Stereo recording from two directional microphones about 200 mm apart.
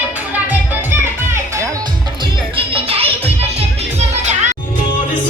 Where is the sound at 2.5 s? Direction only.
30° right (ahead or behind).